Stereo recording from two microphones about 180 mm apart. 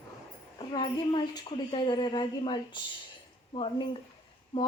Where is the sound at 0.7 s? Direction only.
25° left (ahead or behind).